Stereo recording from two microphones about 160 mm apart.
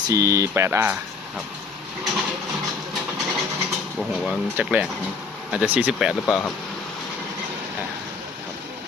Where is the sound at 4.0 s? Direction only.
Centre (ahead or behind).